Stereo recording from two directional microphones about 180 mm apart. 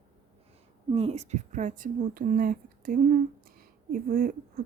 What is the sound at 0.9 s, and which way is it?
Speech, 35° right (ahead or behind).